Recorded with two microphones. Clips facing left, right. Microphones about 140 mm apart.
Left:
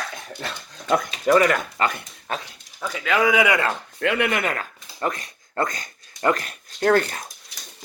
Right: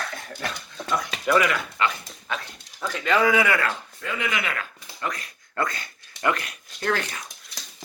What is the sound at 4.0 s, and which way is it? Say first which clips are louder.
Speech: left 9 dB; 65° left (ahead or behind).